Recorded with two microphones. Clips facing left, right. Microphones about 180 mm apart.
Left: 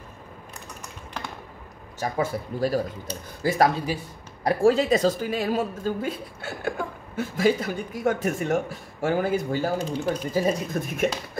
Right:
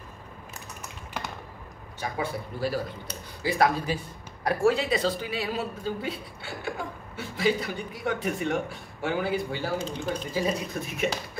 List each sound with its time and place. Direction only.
2.0 s speech: 45° left (ahead or behind)